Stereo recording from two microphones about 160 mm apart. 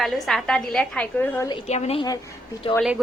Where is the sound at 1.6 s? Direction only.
40° left (ahead or behind).